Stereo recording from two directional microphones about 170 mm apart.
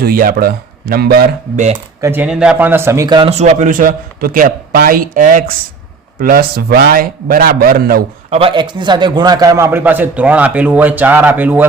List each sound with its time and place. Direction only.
0.0 s a man's voice: 60° right (ahead or behind)
1.5 s speech: 45° right (ahead or behind)
2.0 s a man's voice: 10° right (ahead or behind); by 8.0 s 60° right (ahead or behind)
8.3 s a man's voice: 35° right (ahead or behind); by 11.6 s 10° right (ahead or behind)